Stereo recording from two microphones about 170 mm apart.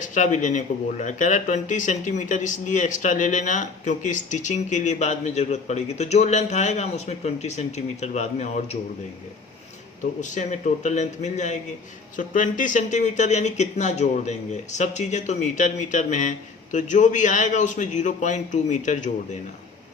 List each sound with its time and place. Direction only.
0.0 s speech: 45° left (ahead or behind)
10.2 s speech: 45° left (ahead or behind)